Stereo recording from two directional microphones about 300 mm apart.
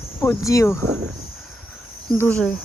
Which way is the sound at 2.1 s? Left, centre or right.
Centre.